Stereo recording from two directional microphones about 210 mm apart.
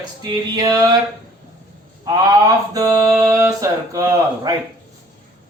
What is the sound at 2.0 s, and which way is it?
Mantra, 15° right (ahead or behind).